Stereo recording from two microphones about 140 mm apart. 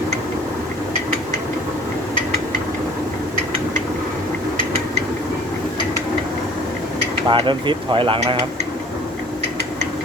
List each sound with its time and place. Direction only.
7.3 s speech: 35° right (ahead or behind)